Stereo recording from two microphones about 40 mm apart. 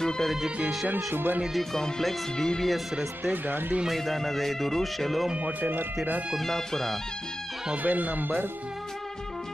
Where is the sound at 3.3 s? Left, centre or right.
Right.